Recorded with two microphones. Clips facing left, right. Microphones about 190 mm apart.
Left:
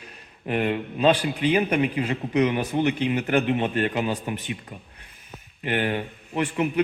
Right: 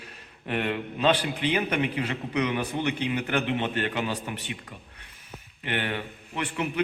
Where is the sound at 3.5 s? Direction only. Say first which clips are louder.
Left 4 dB; 35° left (ahead or behind).